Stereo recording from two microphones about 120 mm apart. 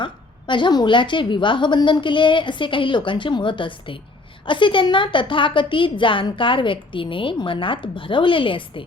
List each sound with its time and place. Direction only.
0.0 s a woman's voice: 40° left (ahead or behind)